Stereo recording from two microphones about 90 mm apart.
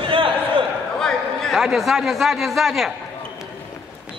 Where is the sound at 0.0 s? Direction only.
75° right (ahead or behind).